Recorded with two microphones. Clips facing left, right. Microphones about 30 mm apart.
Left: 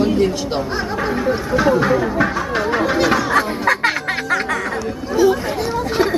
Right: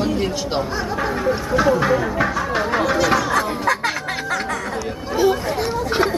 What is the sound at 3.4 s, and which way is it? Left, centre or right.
Music, left.